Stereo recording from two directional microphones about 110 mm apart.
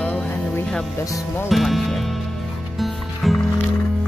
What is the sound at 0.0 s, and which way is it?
Music, 15° left (ahead or behind).